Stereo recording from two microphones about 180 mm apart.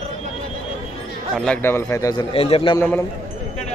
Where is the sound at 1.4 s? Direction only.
10° left (ahead or behind); by 2.8 s 30° left (ahead or behind).